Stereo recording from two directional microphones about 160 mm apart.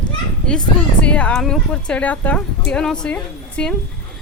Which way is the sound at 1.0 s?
5° left (ahead or behind).